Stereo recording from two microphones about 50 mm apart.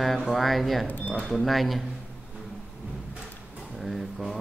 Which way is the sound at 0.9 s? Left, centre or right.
Left.